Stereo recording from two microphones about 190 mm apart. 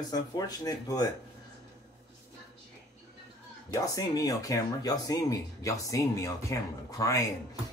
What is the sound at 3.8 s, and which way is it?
Speech, 20° left (ahead or behind).